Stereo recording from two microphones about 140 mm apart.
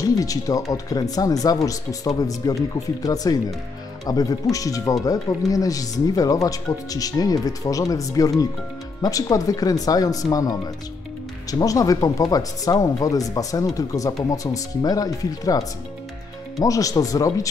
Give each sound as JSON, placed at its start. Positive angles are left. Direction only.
{"t": 0.0, "sound": "speech", "side_deg": 25}